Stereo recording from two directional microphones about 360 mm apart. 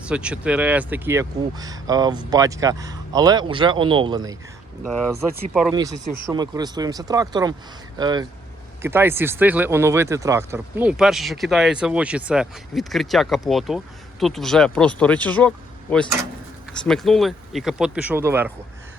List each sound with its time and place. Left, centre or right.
0.0 s speech: centre
5.1 s speech: right
5.5 s speech: centre